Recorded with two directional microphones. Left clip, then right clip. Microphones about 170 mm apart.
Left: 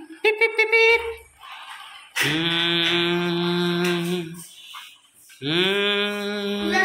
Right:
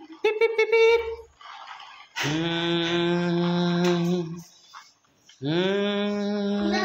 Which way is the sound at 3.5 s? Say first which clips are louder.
Left 3 dB; 35° right (ahead or behind).